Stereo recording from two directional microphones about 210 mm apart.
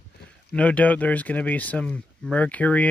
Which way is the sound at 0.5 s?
5° left (ahead or behind).